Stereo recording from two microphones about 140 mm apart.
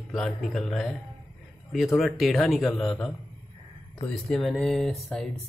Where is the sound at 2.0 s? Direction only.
Centre (ahead or behind).